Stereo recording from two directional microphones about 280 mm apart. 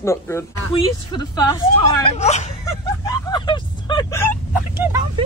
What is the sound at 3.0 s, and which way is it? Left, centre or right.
Vehicle, centre.